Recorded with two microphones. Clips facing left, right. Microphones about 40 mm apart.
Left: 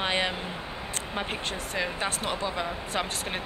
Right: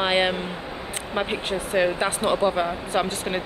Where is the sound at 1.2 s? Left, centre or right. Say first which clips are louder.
Right 7 dB; centre; by 2.6 s right.